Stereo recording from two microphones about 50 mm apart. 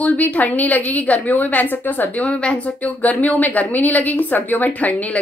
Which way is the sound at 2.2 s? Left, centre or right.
Left.